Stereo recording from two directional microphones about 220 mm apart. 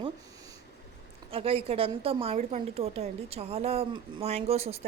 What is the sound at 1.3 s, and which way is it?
A woman's voice, 25° right (ahead or behind).